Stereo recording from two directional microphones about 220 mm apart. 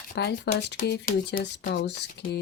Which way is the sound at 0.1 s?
50° left (ahead or behind).